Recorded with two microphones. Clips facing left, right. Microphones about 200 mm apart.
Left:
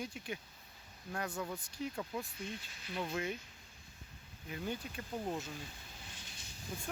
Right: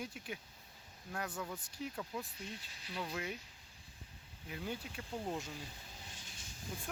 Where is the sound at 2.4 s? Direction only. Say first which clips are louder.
Left 4 dB; 35° right (ahead or behind).